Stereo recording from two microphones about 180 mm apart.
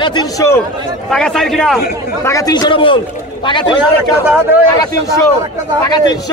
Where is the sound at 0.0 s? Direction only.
25° left (ahead or behind).